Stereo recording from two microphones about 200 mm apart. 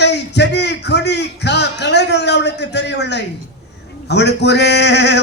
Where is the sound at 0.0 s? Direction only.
55° left (ahead or behind).